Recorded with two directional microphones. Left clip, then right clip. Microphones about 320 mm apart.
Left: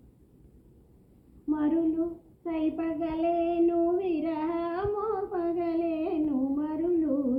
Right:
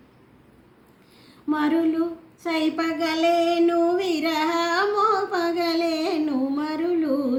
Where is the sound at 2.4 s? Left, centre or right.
Right.